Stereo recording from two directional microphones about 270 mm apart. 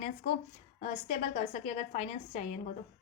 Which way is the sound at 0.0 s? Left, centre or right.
Left.